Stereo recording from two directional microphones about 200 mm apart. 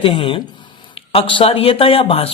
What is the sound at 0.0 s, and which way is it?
Speech, 25° left (ahead or behind).